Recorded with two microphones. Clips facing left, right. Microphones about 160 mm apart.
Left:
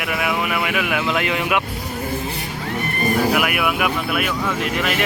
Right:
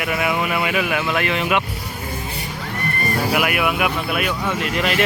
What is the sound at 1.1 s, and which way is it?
Speech, 15° left (ahead or behind).